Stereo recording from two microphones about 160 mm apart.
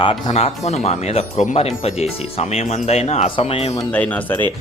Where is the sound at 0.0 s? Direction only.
35° left (ahead or behind).